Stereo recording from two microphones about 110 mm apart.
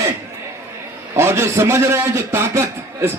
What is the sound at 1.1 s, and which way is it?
Speech, 25° right (ahead or behind).